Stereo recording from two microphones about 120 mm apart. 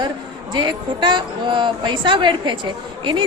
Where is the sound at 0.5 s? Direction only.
40° right (ahead or behind).